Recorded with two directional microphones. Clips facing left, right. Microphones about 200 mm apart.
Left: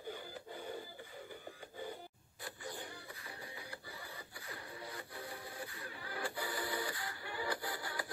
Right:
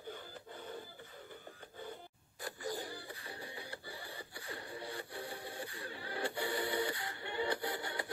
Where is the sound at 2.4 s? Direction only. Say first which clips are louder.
Right 5 dB; 40° right (ahead or behind).